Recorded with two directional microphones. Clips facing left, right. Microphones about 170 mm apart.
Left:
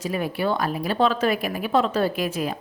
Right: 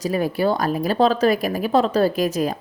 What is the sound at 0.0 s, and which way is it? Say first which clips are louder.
A woman's voice: right 5 dB; 40° right (ahead or behind).